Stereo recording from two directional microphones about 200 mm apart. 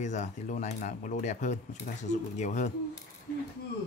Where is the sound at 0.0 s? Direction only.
35° left (ahead or behind).